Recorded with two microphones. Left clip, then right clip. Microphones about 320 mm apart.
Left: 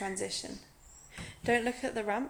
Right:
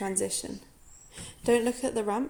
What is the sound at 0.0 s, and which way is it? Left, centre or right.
Speech, centre.